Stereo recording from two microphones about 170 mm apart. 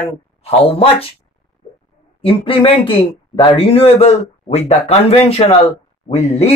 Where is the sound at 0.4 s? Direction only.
35° left (ahead or behind).